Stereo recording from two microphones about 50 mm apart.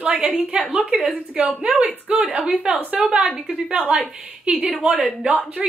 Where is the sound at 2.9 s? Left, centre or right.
Right.